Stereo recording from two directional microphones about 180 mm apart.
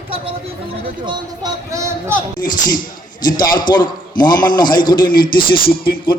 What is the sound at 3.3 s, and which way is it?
A man's voice, 25° left (ahead or behind).